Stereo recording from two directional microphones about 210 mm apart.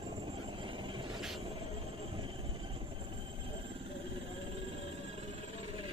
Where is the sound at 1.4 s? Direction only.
25° right (ahead or behind).